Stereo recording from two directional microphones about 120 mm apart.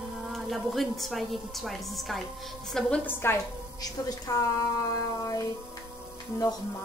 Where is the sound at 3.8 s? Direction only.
30° left (ahead or behind).